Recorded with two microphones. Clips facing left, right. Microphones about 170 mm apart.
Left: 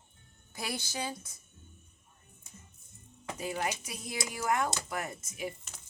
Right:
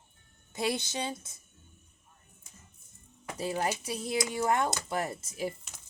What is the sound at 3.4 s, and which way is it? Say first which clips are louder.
Speech: right 4 dB; 35° right (ahead or behind).